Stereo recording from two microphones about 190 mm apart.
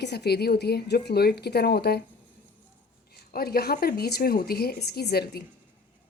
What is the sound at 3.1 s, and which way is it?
A woman's voice, 55° left (ahead or behind).